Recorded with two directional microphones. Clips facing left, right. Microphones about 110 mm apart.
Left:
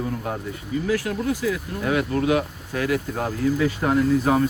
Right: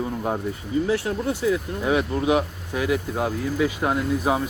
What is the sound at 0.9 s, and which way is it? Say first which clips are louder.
Speech: left 4 dB; 25° right (ahead or behind).